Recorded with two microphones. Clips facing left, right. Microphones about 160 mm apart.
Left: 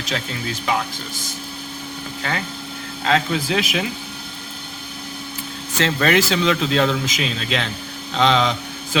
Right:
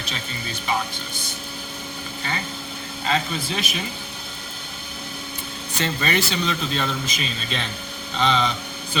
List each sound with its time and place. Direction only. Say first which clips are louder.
0.0 s speech: left 6 dB; 90° left
3.0 s speech: left 5 dB; 90° left
5.7 s speech: left 6 dB; 90° left